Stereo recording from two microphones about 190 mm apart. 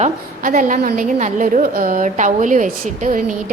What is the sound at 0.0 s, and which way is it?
A woman's voice, 45° right (ahead or behind).